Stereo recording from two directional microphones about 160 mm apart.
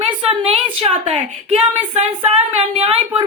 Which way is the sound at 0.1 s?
35° right (ahead or behind).